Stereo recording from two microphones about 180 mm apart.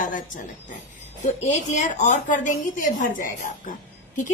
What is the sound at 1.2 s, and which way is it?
A woman's voice, 40° left (ahead or behind).